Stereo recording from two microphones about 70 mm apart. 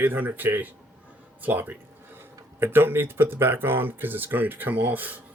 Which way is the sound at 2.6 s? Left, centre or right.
Right.